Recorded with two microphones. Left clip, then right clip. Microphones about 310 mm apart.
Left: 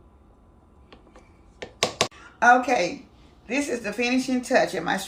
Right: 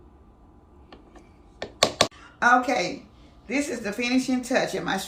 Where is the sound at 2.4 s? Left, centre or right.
Centre.